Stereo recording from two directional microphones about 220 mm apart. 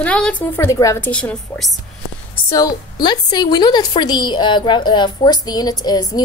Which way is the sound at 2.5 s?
20° left (ahead or behind).